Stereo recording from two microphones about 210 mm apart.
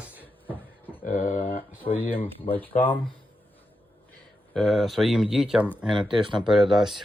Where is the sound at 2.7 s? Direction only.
10° left (ahead or behind).